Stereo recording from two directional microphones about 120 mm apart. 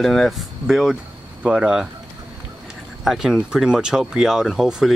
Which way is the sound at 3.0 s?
5° right (ahead or behind).